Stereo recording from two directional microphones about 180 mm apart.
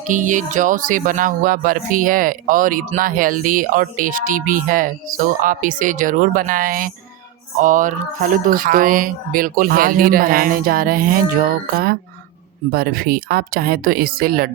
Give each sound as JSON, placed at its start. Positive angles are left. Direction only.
{"t": 0.1, "sound": "speech", "side_deg": -45}